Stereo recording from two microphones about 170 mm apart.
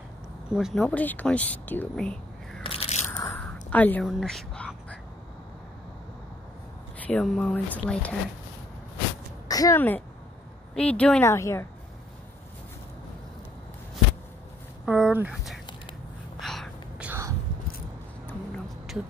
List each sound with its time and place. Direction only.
0.5 s speech: 5° right (ahead or behind)
2.6 s crunch: 35° left (ahead or behind)
3.1 s a sound: 10° left (ahead or behind)
7.1 s speech: 5° left (ahead or behind)
9.5 s speech: 20° left (ahead or behind)
14.9 s speech: 5° right (ahead or behind)
16.3 s gasp: centre (ahead or behind)